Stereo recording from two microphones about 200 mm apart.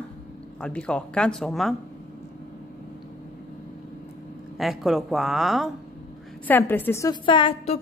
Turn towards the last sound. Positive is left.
turn(degrees=30)  # may be behind; listen again after turning